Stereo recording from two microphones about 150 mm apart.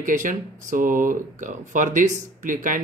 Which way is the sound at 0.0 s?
60° right (ahead or behind).